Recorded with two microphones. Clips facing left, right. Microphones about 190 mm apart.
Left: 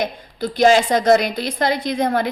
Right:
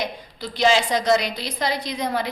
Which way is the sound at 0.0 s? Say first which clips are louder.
Left 6 dB; 50° left (ahead or behind).